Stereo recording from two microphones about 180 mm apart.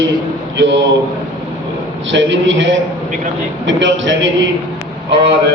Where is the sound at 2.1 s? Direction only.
90° right.